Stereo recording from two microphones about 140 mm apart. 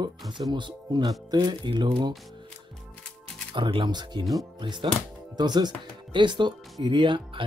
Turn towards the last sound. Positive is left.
turn(degrees=-35)  # may be behind; listen again after turning